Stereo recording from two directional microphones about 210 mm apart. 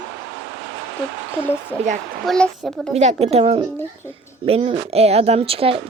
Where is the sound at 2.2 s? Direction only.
5° left (ahead or behind).